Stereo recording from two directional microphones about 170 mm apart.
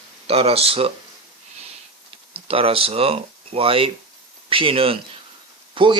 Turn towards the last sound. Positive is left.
turn(degrees=-30)  # may be behind; listen again after turning